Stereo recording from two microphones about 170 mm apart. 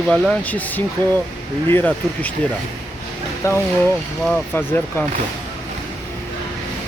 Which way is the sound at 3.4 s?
15° left (ahead or behind).